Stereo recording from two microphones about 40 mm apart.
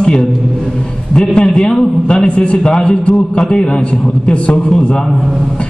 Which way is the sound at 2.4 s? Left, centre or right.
Left.